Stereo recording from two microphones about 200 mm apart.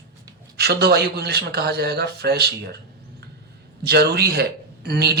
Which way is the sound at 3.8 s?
55° right (ahead or behind).